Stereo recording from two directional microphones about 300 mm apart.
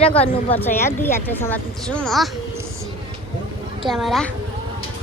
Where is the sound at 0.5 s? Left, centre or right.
Centre.